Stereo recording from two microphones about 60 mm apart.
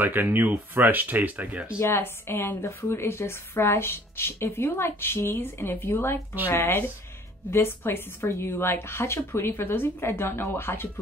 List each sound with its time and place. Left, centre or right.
0.0 s speech: right
1.8 s a woman's voice: left